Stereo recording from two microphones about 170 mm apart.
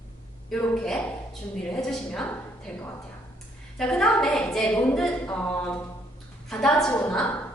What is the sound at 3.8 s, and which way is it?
A woman's voice, 5° left (ahead or behind).